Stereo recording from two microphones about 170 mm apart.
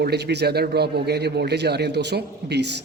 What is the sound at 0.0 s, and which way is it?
A man's voice, 75° right (ahead or behind).